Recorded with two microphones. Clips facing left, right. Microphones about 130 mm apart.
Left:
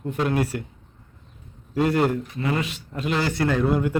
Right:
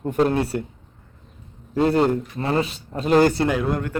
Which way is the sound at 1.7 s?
30° right (ahead or behind).